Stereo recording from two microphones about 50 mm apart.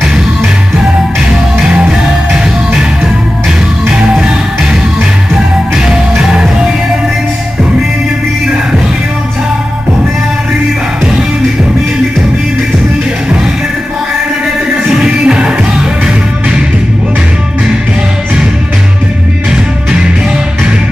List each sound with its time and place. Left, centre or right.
1.7 s music: right
3.9 s music: centre
5.9 s music: centre
14.9 s music: centre